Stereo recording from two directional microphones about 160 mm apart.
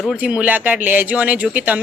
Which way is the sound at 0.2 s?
5° right (ahead or behind).